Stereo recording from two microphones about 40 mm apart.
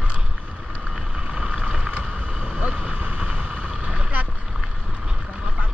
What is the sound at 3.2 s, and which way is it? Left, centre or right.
Boat, right.